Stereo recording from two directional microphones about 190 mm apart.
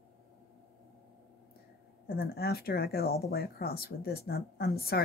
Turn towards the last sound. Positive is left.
turn(degrees=55)  # may be behind; listen again after turning